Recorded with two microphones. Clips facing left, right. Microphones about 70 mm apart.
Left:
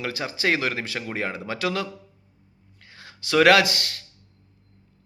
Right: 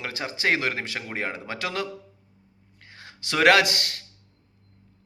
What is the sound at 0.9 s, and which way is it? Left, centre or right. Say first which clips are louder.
Speech: left 2 dB; right.